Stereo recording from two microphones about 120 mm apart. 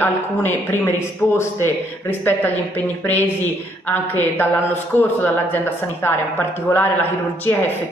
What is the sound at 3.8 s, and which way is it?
A woman's voice, 15° left (ahead or behind).